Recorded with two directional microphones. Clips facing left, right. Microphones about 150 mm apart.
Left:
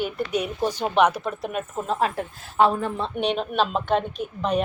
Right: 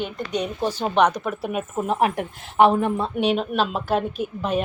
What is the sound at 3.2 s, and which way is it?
Speech, centre (ahead or behind).